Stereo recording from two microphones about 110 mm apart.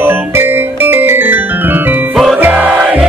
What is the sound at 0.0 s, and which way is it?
Music, 20° right (ahead or behind).